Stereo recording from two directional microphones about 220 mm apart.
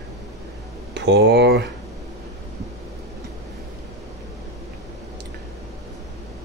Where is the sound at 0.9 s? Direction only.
50° right (ahead or behind).